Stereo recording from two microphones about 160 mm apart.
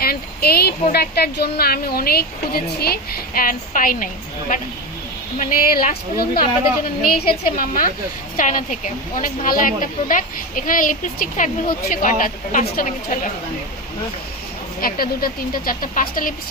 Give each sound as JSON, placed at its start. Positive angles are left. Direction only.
{"t": 0.0, "sound": "speech", "side_deg": 70}
{"t": 1.5, "sound": "a woman's voice", "side_deg": 75}
{"t": 7.4, "sound": "speech", "side_deg": 60}
{"t": 14.8, "sound": "speech", "side_deg": 65}